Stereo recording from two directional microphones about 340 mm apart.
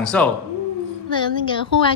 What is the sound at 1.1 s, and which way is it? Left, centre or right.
Speech, centre.